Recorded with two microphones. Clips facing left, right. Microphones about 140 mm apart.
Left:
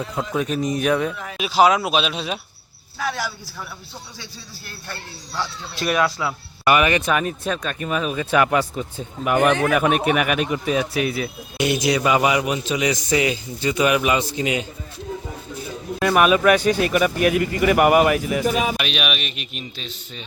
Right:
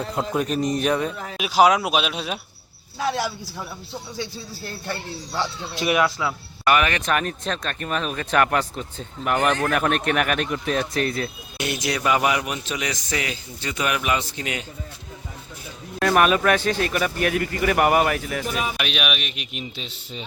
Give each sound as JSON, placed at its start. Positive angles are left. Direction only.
{"t": 0.2, "sound": "a man's voice", "side_deg": 0}
{"t": 1.4, "sound": "speech", "side_deg": -10}
{"t": 3.0, "sound": "speech", "side_deg": -25}
{"t": 6.1, "sound": "speech", "side_deg": 10}
{"t": 16.0, "sound": "speech", "side_deg": 5}
{"t": 18.8, "sound": "a man's voice", "side_deg": -5}
{"t": 19.7, "sound": "speech", "side_deg": -20}